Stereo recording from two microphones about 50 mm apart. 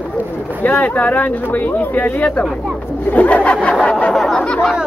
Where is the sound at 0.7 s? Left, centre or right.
Left.